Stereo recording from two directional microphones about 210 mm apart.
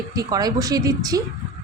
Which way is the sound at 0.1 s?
15° right (ahead or behind).